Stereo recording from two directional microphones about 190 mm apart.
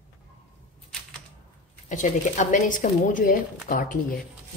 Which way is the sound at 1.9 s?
40° left (ahead or behind).